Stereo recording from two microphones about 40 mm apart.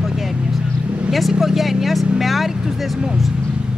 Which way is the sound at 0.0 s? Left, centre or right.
Centre.